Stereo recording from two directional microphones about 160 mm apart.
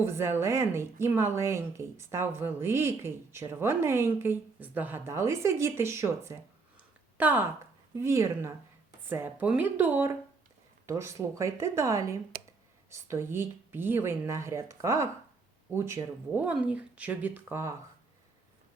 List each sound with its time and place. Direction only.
0.0 s speech: 15° right (ahead or behind)